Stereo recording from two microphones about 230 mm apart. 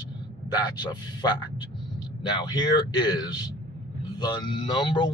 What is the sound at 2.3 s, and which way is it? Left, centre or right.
Speech, centre.